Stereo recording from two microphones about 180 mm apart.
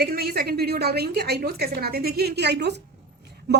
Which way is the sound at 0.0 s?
60° right (ahead or behind).